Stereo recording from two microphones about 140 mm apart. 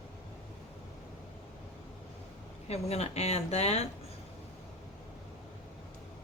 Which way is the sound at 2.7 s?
50° left (ahead or behind).